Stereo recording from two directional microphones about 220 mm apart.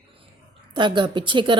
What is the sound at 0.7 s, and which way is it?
Speech, 20° right (ahead or behind).